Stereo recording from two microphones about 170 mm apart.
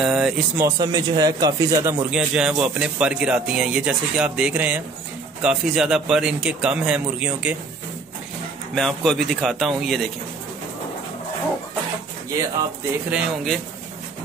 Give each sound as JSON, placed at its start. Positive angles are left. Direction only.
{"t": 0.0, "sound": "a sound", "side_deg": -5}
{"t": 0.6, "sound": "speech", "side_deg": -20}
{"t": 2.0, "sound": "speech", "side_deg": -5}
{"t": 8.7, "sound": "speech", "side_deg": 0}
{"t": 13.1, "sound": "speech", "side_deg": 0}